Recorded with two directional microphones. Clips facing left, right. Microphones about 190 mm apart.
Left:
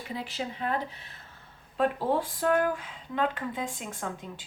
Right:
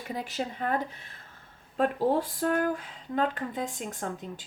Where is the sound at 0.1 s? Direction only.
45° right (ahead or behind).